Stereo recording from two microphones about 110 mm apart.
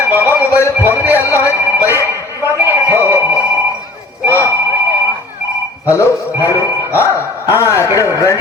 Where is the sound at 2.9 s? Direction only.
20° right (ahead or behind).